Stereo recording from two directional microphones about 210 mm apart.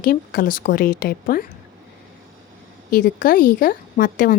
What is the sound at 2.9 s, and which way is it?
A woman's voice, 40° left (ahead or behind).